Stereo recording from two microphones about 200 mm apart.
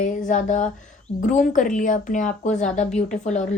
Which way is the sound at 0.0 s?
40° left (ahead or behind).